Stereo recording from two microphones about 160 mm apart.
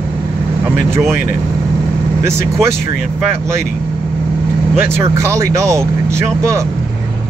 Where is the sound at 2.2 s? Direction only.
15° right (ahead or behind).